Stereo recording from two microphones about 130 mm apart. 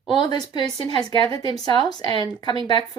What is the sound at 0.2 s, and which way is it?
Speech, 35° left (ahead or behind).